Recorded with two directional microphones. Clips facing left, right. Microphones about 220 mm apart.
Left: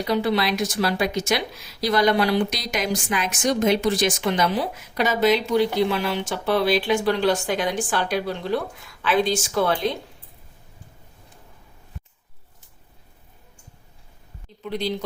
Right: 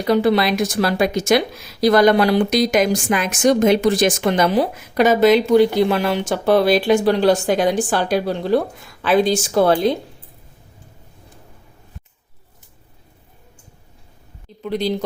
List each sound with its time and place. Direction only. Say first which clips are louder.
0.0 s speech: right 6 dB; 50° right (ahead or behind)
14.6 s speech: right 5 dB; 45° right (ahead or behind)